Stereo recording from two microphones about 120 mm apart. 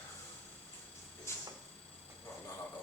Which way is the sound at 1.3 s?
20° left (ahead or behind).